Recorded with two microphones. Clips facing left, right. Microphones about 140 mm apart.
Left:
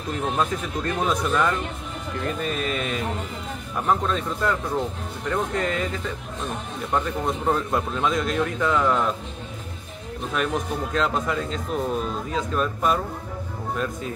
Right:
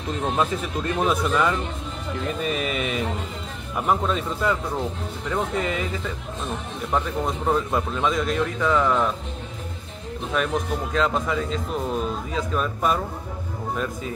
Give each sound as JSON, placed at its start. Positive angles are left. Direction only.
{"t": 0.4, "sound": "a man's voice", "side_deg": -10}
{"t": 6.9, "sound": "a man's voice", "side_deg": 0}
{"t": 10.3, "sound": "a man's voice", "side_deg": 0}